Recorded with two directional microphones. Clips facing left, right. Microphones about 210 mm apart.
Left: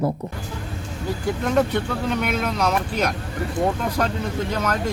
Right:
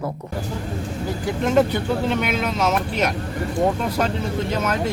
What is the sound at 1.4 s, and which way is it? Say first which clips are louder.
Speech: right 3 dB; centre (ahead or behind).